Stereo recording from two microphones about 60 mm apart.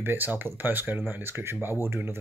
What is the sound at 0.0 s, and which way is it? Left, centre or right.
Speech, right.